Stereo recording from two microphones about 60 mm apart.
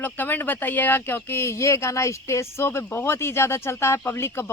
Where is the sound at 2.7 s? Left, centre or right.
Left.